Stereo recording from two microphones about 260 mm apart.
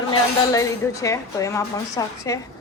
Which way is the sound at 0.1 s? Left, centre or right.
Centre.